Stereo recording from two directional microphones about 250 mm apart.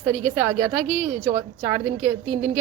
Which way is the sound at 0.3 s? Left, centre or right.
Centre.